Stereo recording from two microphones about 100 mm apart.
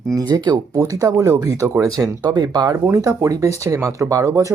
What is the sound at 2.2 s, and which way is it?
Speech, 45° right (ahead or behind).